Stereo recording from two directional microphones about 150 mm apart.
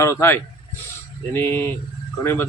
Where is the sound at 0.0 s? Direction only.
20° left (ahead or behind).